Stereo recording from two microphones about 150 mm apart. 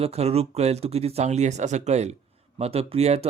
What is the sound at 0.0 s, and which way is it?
A man's voice, 45° right (ahead or behind).